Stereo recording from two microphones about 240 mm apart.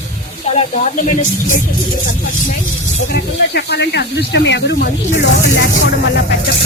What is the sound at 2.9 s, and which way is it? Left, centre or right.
Speech, left.